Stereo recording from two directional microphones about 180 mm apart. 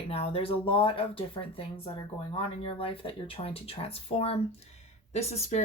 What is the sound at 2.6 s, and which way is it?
Speech, 30° left (ahead or behind).